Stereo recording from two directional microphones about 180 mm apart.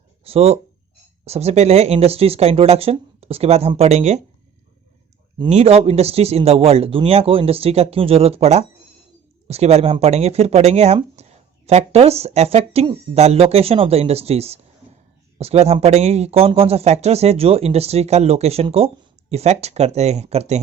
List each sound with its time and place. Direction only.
0.3 s speech: 35° right (ahead or behind)
5.5 s speech: 35° right (ahead or behind)